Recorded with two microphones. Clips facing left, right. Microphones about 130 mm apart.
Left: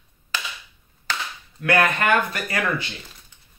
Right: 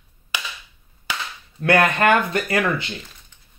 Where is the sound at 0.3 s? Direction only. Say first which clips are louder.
Even; 15° right (ahead or behind).